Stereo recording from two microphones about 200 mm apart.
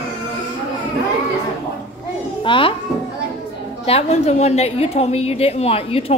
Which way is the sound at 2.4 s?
25° left (ahead or behind).